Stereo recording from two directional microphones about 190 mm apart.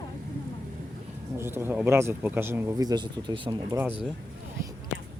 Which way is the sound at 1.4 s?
10° right (ahead or behind).